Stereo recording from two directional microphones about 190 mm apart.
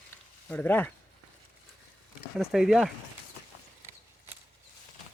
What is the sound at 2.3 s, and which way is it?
Speech, centre (ahead or behind).